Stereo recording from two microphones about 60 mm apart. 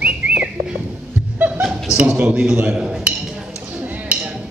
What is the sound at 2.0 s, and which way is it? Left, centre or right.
Speech, right.